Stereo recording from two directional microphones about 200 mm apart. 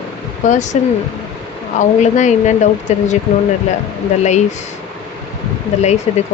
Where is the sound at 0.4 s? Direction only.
35° left (ahead or behind).